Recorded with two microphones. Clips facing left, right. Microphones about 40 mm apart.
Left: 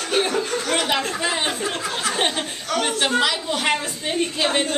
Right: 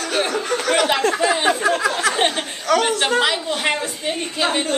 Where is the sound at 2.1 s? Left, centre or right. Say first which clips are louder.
Right 3 dB; centre.